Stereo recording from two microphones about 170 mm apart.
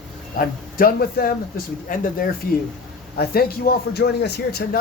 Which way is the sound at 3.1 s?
65° left (ahead or behind).